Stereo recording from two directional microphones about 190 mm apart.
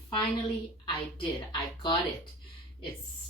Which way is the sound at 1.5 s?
25° left (ahead or behind).